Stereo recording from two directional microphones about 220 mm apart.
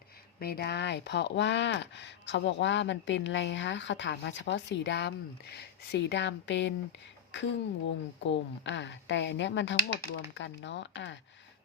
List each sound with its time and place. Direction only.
0.3 s a woman's voice: 45° left (ahead or behind)